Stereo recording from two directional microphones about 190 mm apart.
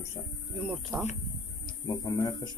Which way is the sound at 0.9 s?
10° right (ahead or behind).